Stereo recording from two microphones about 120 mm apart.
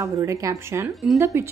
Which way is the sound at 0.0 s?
25° right (ahead or behind).